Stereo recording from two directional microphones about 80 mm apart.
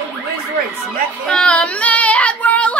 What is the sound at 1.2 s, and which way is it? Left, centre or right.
Child singing, centre.